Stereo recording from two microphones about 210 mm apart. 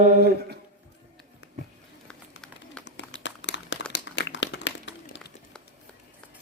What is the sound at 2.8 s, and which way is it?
Crumpling, 60° left (ahead or behind).